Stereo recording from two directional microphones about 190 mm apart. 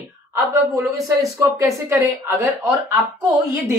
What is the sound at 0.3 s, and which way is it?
Speech, 15° right (ahead or behind).